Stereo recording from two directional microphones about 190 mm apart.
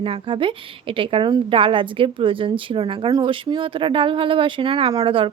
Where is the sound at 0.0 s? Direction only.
25° right (ahead or behind).